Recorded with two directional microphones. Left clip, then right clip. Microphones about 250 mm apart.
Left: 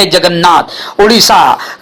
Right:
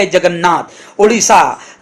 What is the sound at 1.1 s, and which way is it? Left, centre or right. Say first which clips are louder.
Speech: left 6 dB; centre.